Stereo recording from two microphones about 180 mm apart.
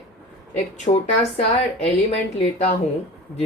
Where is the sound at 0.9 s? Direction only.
40° left (ahead or behind).